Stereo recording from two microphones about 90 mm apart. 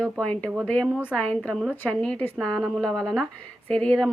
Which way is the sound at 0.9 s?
15° right (ahead or behind).